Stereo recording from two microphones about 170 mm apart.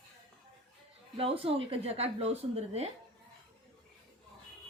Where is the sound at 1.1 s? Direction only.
35° right (ahead or behind).